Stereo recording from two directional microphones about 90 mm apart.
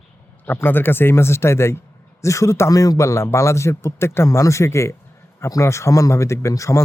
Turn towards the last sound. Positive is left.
turn(degrees=35)  # may be behind; listen again after turning